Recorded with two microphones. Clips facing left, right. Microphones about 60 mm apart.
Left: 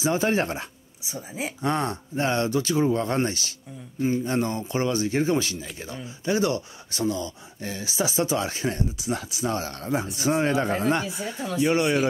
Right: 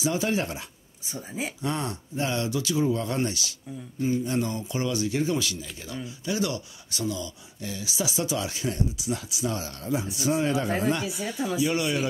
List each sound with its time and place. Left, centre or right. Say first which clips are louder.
0.0 s speech: left 3 dB; left
1.0 s speech: left 1 dB; centre
1.6 s speech: left 7 dB; left